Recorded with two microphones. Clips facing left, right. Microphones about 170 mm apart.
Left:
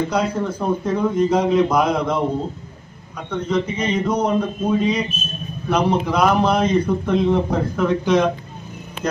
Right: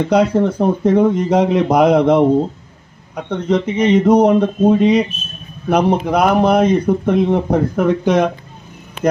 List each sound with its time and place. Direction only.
0.1 s speech: 75° right (ahead or behind)
3.3 s speech: 70° right (ahead or behind)
5.7 s a man's voice: 55° right (ahead or behind)